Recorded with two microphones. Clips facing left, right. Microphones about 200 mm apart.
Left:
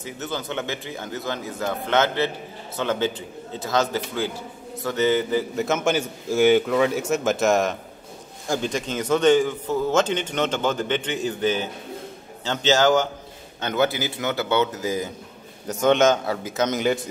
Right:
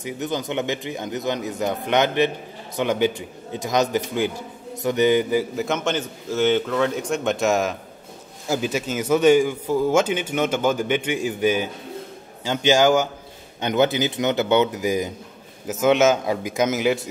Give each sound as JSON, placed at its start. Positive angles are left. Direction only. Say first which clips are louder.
{"t": 0.0, "sound": "speech", "louder": "right 4 dB", "side_deg": -15}
{"t": 5.6, "sound": "a man's voice", "louder": "left 1 dB", "side_deg": 5}
{"t": 15.6, "sound": "speech", "louder": "right 1 dB", "side_deg": -5}